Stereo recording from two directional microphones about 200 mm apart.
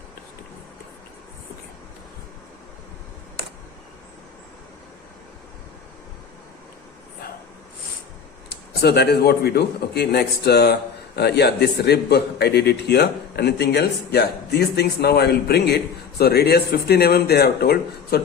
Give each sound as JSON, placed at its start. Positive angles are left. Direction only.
{"t": 8.4, "sound": "a man's voice", "side_deg": 55}